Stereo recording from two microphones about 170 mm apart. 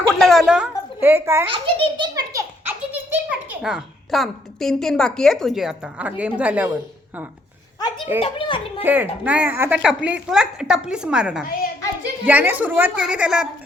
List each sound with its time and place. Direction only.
0.2 s a woman's voice: centre (ahead or behind); by 1.5 s 15° right (ahead or behind)
1.5 s a child's voice: 30° right (ahead or behind)
2.6 s a sound: 10° right (ahead or behind)
3.6 s a woman's voice: 5° right (ahead or behind)
7.8 s a child's voice: 25° left (ahead or behind)
8.8 s a woman's voice: 10° right (ahead or behind)